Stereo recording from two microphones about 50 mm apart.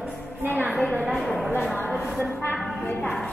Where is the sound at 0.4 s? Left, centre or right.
Right.